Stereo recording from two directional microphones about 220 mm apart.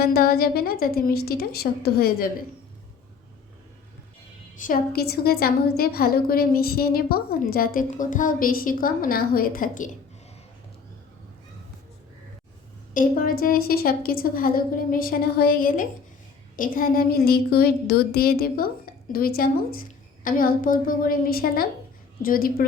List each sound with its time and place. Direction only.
0.0 s a woman's voice: 45° left (ahead or behind)
4.5 s a woman's voice: 40° left (ahead or behind)
12.9 s a woman's voice: 40° left (ahead or behind)